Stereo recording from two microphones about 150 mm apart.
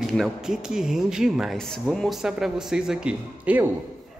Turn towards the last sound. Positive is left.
turn(degrees=-10)  # may be behind; listen again after turning